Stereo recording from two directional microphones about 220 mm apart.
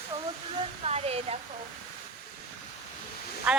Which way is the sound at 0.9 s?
25° right (ahead or behind).